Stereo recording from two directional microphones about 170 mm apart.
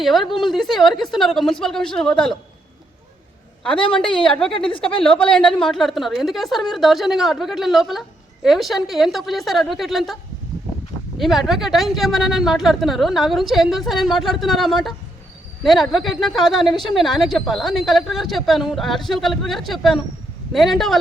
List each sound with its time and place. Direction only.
0.0 s speech: centre (ahead or behind)
4.3 s speech: 5° left (ahead or behind)
4.5 s a woman's voice: 30° left (ahead or behind)
5.3 s speech: 5° left (ahead or behind)
11.2 s speech: centre (ahead or behind)